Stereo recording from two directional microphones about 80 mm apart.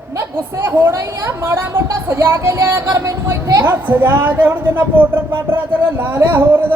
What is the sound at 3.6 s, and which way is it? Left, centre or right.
Speech, right.